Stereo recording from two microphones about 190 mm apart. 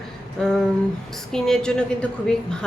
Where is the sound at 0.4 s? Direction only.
5° left (ahead or behind).